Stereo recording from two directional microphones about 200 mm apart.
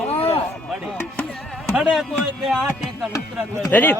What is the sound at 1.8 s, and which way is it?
Music, centre (ahead or behind).